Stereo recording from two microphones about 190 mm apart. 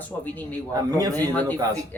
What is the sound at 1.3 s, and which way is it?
Speech, 10° left (ahead or behind).